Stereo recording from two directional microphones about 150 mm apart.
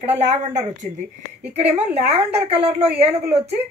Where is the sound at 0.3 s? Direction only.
50° right (ahead or behind).